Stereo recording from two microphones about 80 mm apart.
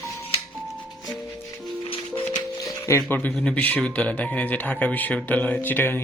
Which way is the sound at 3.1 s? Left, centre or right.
Centre.